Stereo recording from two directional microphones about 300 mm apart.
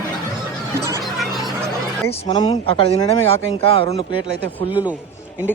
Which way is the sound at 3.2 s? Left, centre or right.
Right.